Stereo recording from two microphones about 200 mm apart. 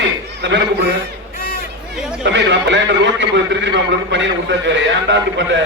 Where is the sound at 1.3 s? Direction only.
45° left (ahead or behind).